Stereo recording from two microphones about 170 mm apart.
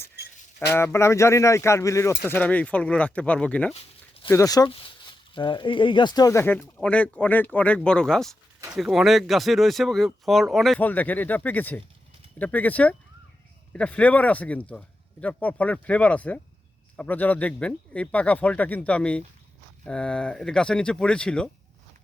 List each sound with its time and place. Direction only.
0.7 s speech: 15° left (ahead or behind)
3.8 s a sound: 35° left (ahead or behind)
4.3 s speech: 20° left (ahead or behind)